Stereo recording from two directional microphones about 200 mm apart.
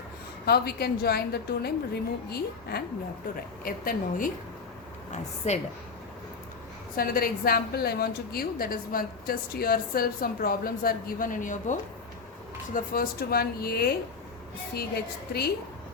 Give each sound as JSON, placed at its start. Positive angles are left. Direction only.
{"t": 0.4, "sound": "a woman's voice", "side_deg": 50}
{"t": 5.5, "sound": "speech", "side_deg": 35}
{"t": 6.9, "sound": "a woman's voice", "side_deg": 45}